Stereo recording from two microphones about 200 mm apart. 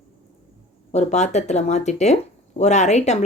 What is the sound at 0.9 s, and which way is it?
Speech, 35° left (ahead or behind).